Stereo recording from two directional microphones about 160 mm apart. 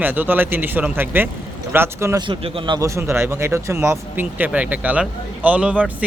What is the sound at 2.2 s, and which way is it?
Speech, 35° right (ahead or behind).